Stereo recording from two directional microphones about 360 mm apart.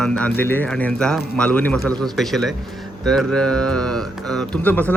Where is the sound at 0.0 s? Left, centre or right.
Centre.